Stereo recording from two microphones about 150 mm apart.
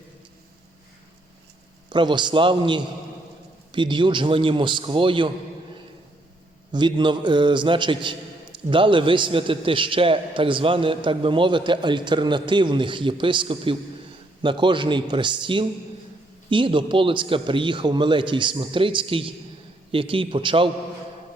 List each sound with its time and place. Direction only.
1.9 s a man's voice: 30° right (ahead or behind)
6.7 s a man's voice: 30° right (ahead or behind)